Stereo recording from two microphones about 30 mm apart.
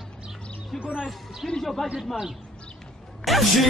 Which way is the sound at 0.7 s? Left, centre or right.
Right.